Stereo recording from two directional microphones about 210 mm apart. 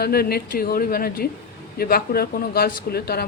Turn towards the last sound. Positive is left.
turn(degrees=50)  # may be behind; listen again after turning